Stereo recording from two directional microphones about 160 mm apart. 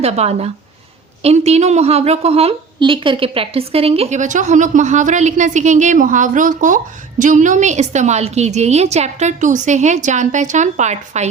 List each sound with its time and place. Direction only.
0.0 s a woman's voice: 40° right (ahead or behind)